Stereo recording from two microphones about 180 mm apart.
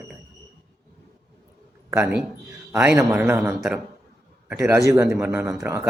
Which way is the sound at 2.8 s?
10° right (ahead or behind).